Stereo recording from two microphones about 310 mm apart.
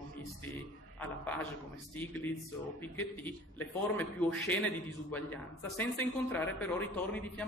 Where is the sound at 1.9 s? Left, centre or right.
Centre.